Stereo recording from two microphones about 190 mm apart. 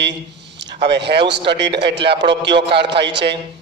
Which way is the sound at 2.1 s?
65° right (ahead or behind).